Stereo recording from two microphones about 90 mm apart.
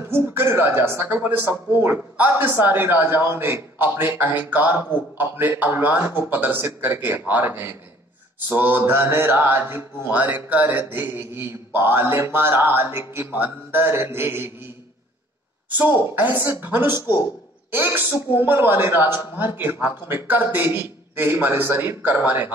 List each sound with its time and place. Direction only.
0.1 s speech: 25° right (ahead or behind)
15.7 s a woman's voice: 20° right (ahead or behind)